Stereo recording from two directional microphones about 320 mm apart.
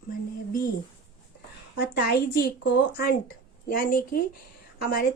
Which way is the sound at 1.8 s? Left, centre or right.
Left.